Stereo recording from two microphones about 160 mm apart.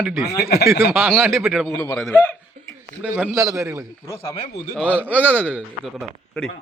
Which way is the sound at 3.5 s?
20° right (ahead or behind).